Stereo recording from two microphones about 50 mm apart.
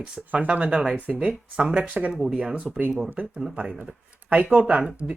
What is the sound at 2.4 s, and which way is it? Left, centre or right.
Speech, right.